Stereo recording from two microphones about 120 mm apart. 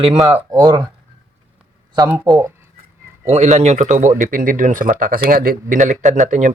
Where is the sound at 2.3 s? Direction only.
40° right (ahead or behind).